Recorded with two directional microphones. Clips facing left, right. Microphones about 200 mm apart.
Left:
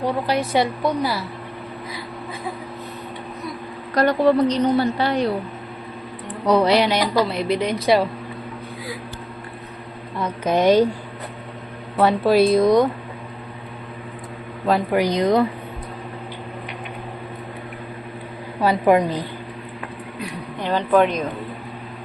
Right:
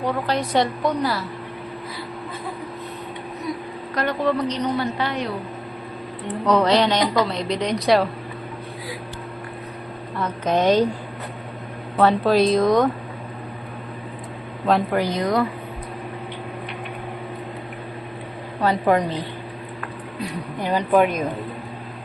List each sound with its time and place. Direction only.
0.3 s a woman's voice: 10° left (ahead or behind)
3.9 s a woman's voice: 40° left (ahead or behind)
6.4 s a woman's voice: 10° left (ahead or behind)
10.2 s a woman's voice: 10° left (ahead or behind)
11.9 s a woman's voice: 10° left (ahead or behind)
14.7 s a woman's voice: 15° left (ahead or behind)
18.6 s a woman's voice: 10° left (ahead or behind)
20.6 s speech: 10° right (ahead or behind)